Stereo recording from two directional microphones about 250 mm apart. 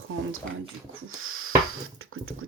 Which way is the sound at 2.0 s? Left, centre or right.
Right.